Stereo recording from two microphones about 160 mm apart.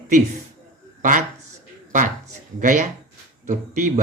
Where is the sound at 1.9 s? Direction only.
55° right (ahead or behind).